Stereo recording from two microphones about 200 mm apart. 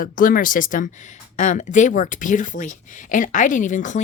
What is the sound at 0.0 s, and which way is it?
Speech, 45° left (ahead or behind).